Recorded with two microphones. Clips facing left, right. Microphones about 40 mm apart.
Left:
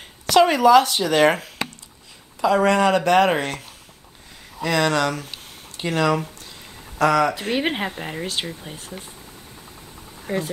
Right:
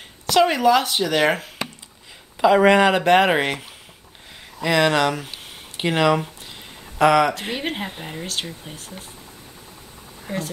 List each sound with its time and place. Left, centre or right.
0.3 s speech: centre
2.5 s speech: right
4.6 s speech: right
5.8 s speech: right
7.5 s speech: centre
10.2 s speech: centre